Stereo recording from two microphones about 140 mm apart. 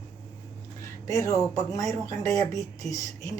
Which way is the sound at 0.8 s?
20° left (ahead or behind).